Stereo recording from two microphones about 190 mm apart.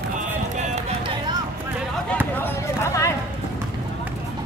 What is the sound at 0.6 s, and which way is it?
Run, 35° right (ahead or behind).